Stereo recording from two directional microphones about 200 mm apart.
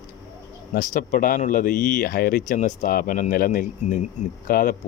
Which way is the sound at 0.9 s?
45° left (ahead or behind).